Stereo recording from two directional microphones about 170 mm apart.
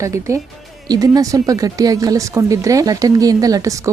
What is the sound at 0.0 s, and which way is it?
A woman's voice, 20° right (ahead or behind).